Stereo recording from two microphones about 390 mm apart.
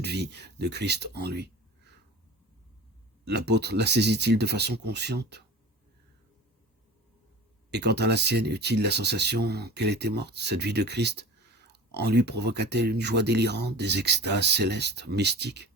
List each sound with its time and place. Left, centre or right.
0.0 s speech: right
3.2 s speech: right
7.7 s speech: right